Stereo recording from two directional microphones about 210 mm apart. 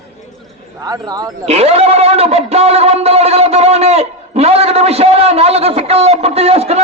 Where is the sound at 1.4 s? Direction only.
30° right (ahead or behind).